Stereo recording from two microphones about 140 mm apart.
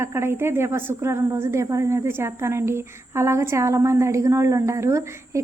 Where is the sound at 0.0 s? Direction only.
20° right (ahead or behind).